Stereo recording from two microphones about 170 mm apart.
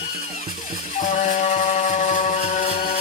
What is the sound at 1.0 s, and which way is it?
Music, 45° left (ahead or behind).